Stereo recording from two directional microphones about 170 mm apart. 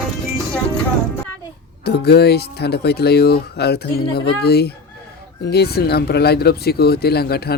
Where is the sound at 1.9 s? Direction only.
70° left (ahead or behind).